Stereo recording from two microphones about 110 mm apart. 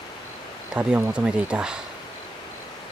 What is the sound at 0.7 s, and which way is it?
Speech, 15° right (ahead or behind).